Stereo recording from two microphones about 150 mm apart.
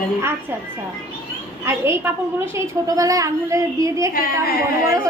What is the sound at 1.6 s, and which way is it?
A woman's voice, 15° right (ahead or behind).